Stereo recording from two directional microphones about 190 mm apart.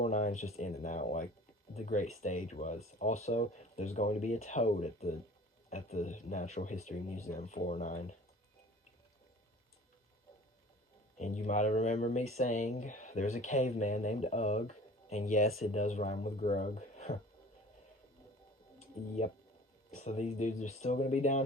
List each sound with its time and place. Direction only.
0.0 s speech: 35° left (ahead or behind)
11.2 s speech: 40° left (ahead or behind)
20.0 s speech: 35° left (ahead or behind)